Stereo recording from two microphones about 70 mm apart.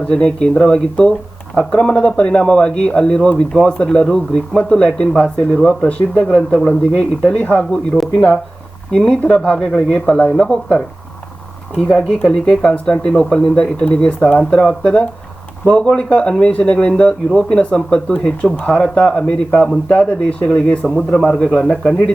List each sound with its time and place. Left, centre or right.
0.1 s speech: centre
8.9 s speech: centre
20.9 s speech: centre